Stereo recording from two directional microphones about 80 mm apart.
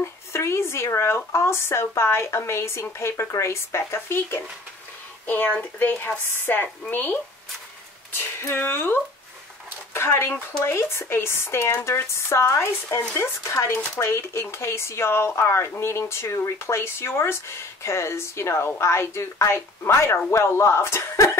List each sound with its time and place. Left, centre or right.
0.0 s speech: left